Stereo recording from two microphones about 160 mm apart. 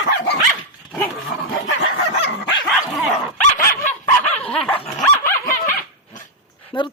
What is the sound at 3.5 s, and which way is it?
Dog, 60° left (ahead or behind).